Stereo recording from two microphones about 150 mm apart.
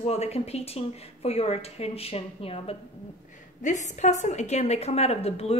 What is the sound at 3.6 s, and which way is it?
A woman's voice, 55° left (ahead or behind).